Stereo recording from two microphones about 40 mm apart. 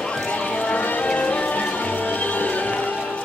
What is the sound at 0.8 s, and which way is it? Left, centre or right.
Music, left.